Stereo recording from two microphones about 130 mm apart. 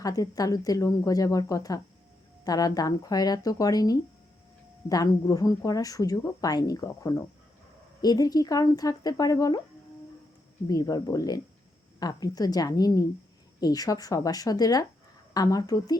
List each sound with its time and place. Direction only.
0.0 s speech: 30° left (ahead or behind)
10.7 s speech: 30° left (ahead or behind)